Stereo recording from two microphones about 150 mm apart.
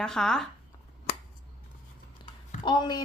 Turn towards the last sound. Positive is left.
turn(degrees=30)  # may be behind; listen again after turning